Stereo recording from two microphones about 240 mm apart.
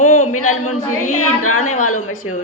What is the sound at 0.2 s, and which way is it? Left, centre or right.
A woman's voice, left.